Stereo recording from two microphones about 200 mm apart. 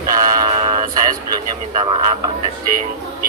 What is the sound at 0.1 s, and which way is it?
Music, 20° right (ahead or behind).